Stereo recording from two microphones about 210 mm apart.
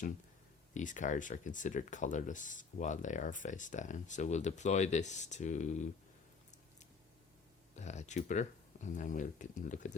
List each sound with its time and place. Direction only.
0.7 s speech: 35° left (ahead or behind)
7.8 s speech: 35° left (ahead or behind)